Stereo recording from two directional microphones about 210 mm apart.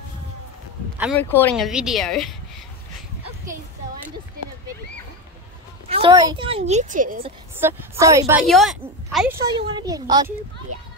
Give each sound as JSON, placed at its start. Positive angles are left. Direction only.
{"t": 1.1, "sound": "speech", "side_deg": 10}
{"t": 1.7, "sound": "speech", "side_deg": -5}
{"t": 5.9, "sound": "a sound", "side_deg": -30}
{"t": 6.2, "sound": "a woman's voice", "side_deg": -25}
{"t": 7.6, "sound": "a woman's voice", "side_deg": -10}
{"t": 8.5, "sound": "speech", "side_deg": 0}
{"t": 9.5, "sound": "a woman's voice", "side_deg": -20}